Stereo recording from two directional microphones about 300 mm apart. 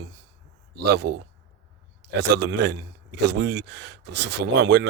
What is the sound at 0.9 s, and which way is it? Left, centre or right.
Speech, right.